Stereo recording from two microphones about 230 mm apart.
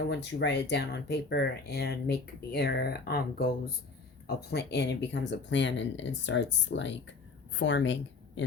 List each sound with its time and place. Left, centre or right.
0.1 s speech: left